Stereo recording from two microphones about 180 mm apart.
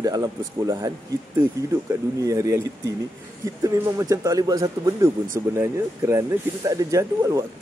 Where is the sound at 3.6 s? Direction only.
20° right (ahead or behind).